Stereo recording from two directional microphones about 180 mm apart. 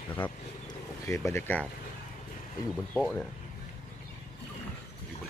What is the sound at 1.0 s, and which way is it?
Speech, 15° left (ahead or behind).